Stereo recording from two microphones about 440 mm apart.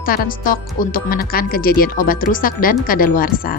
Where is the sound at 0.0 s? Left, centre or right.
Centre.